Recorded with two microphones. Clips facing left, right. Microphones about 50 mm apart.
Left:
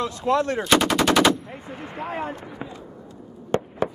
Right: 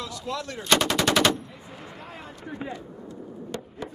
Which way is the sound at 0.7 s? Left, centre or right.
Centre.